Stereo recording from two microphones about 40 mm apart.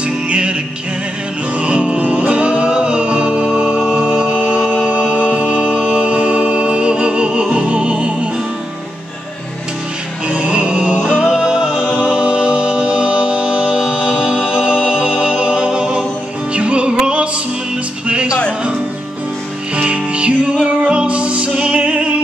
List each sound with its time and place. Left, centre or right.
0.3 s music: right
1.6 s music: right
10.2 s music: right
19.7 s music: right